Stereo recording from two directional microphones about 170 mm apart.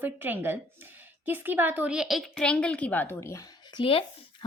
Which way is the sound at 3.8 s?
30° left (ahead or behind).